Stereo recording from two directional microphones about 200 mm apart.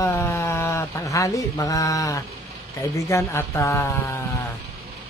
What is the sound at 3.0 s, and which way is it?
Speech, 15° left (ahead or behind).